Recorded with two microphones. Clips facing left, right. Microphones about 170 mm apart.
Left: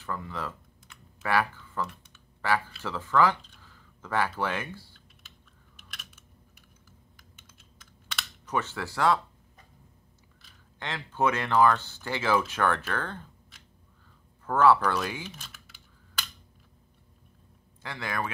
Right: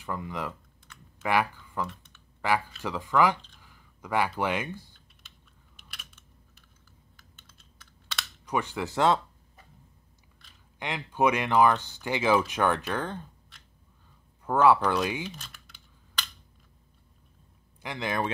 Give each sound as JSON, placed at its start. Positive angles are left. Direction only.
{"t": 0.0, "sound": "speech", "side_deg": -15}
{"t": 8.5, "sound": "speech", "side_deg": -15}
{"t": 10.8, "sound": "speech", "side_deg": -15}
{"t": 14.4, "sound": "speech", "side_deg": -15}
{"t": 15.2, "sound": "computer keyboard", "side_deg": 5}
{"t": 17.8, "sound": "speech", "side_deg": -20}